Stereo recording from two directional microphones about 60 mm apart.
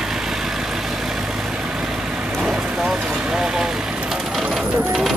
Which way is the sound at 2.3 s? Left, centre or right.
Centre.